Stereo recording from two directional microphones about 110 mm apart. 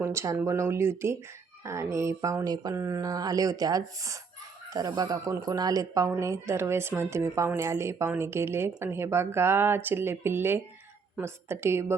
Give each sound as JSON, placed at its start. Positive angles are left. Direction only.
{"t": 0.0, "sound": "speech", "side_deg": -25}
{"t": 1.6, "sound": "a sound", "side_deg": -25}
{"t": 4.7, "sound": "speech", "side_deg": -35}